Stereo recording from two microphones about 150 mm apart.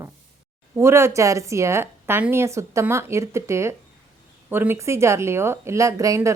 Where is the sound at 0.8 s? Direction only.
15° right (ahead or behind).